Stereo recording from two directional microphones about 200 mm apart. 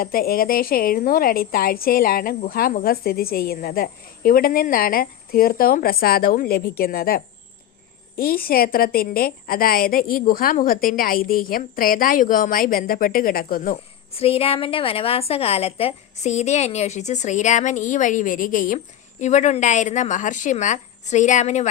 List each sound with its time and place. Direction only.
0.0 s a woman's voice: 45° left (ahead or behind)
14.2 s a woman's voice: 30° left (ahead or behind)